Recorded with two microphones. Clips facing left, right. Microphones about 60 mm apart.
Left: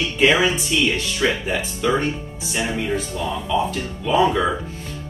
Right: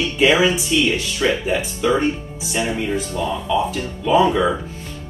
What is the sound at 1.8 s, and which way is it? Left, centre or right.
Speech, centre.